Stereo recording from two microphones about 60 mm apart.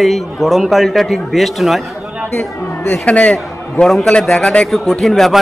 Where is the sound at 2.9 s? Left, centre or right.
Left.